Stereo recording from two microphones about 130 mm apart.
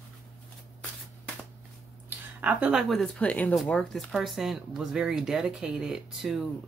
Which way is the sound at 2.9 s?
10° left (ahead or behind).